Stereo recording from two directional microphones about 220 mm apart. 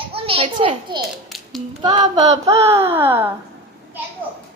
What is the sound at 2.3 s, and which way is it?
Speech, 15° right (ahead or behind).